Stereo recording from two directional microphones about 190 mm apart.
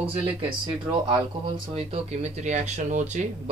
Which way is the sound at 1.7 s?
35° right (ahead or behind).